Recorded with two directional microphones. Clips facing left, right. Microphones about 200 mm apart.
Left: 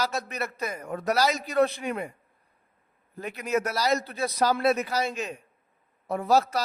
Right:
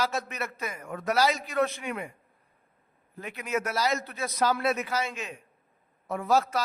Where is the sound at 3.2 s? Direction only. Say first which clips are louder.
Left 4 dB; 40° left (ahead or behind).